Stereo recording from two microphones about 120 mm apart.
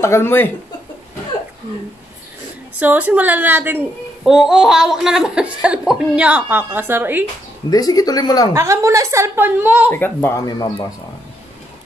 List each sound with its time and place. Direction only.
0.0 s speech: 20° left (ahead or behind)
2.8 s speech: 15° right (ahead or behind)
4.2 s speech: 5° right (ahead or behind)
7.7 s speech: 30° left (ahead or behind)
8.5 s a woman's voice: 25° right (ahead or behind)
9.8 s speech: 15° left (ahead or behind)
10.4 s speech: 30° left (ahead or behind)